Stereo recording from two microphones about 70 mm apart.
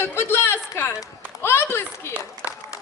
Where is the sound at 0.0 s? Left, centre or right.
Left.